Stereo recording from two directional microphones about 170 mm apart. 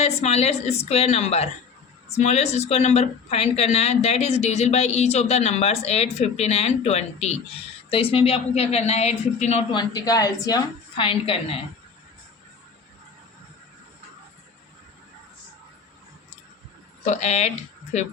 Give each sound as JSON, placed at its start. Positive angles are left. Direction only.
{"t": 0.0, "sound": "speech", "side_deg": 40}
{"t": 9.7, "sound": "a woman's voice", "side_deg": 20}
{"t": 17.1, "sound": "speech", "side_deg": 40}